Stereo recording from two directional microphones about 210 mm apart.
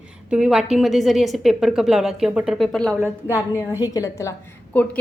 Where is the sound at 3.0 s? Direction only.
10° right (ahead or behind).